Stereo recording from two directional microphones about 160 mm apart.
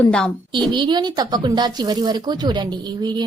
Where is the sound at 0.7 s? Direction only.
30° right (ahead or behind).